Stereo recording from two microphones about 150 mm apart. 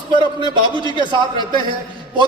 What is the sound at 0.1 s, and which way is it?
A man's voice, 30° right (ahead or behind).